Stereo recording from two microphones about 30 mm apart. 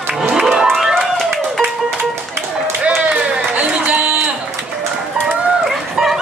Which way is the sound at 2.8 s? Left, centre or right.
Right.